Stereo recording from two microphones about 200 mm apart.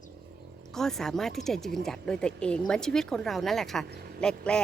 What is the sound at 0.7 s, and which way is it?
A woman's voice, centre (ahead or behind).